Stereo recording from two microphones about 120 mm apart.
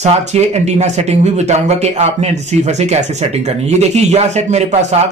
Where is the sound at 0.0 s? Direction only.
70° right (ahead or behind).